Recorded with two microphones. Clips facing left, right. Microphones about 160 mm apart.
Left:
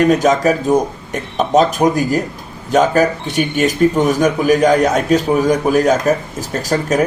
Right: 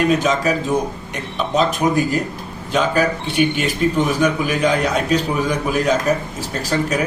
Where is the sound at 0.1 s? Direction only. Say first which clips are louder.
Left 5 dB; 45° left (ahead or behind).